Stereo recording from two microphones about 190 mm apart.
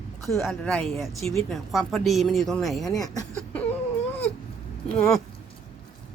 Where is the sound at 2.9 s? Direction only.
20° left (ahead or behind).